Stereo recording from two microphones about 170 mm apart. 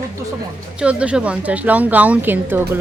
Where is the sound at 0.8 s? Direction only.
5° right (ahead or behind).